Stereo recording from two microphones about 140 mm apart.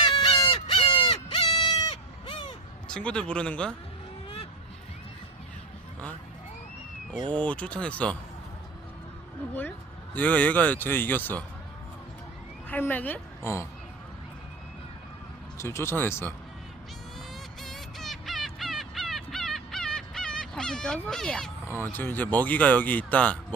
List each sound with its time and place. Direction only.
0.0 s fowl: 35° left (ahead or behind)
2.9 s speech: 5° left (ahead or behind)
7.3 s speech: 10° left (ahead or behind)
10.2 s speech: 10° left (ahead or behind)
12.6 s speech: 10° left (ahead or behind)
15.5 s speech: 20° left (ahead or behind)
17.6 s fowl: centre (ahead or behind)
21.9 s speech: 15° left (ahead or behind)